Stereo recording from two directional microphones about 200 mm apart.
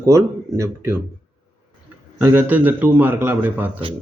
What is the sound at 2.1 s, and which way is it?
Speech, 10° right (ahead or behind).